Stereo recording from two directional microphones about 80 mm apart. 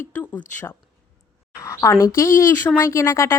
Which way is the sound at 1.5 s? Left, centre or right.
Left.